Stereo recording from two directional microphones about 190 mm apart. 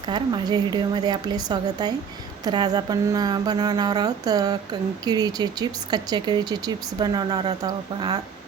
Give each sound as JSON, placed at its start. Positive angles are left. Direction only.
{"t": 0.1, "sound": "speech", "side_deg": -20}